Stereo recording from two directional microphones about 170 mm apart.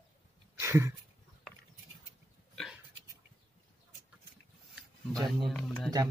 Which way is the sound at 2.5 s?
Centre (ahead or behind).